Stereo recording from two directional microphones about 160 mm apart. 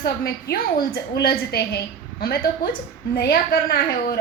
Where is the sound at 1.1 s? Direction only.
80° left.